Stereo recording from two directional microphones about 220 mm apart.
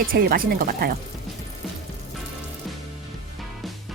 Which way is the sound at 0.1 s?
40° right (ahead or behind).